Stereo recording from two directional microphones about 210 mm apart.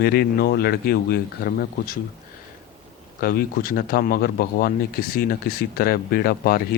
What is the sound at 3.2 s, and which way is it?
Speech, 45° left (ahead or behind).